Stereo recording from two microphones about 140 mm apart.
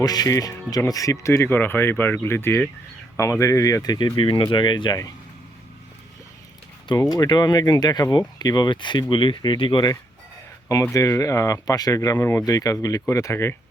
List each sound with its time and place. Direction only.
0.0 s speech: 25° left (ahead or behind)
6.8 s speech: 30° left (ahead or behind)
10.9 s speech: 25° left (ahead or behind)